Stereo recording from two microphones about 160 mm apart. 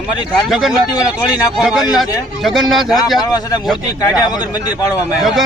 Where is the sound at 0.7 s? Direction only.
25° left (ahead or behind).